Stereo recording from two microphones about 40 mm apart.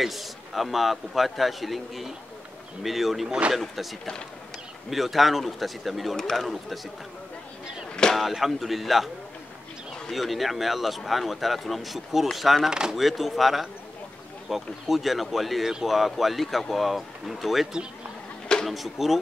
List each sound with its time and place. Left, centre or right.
0.0 s a man's voice: centre
6.1 s speech: centre
6.4 s a man's voice: centre
8.1 s a man's voice: centre
10.1 s a man's voice: centre
12.6 s speech: centre
12.9 s a man's voice: centre
18.7 s a man's voice: centre